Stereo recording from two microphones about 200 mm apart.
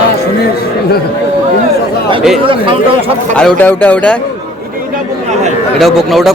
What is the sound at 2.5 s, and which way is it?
Speech, 25° right (ahead or behind).